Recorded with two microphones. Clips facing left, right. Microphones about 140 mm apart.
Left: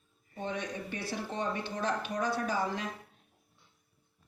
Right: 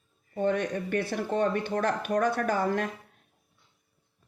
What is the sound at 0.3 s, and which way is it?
Speech, 55° right (ahead or behind).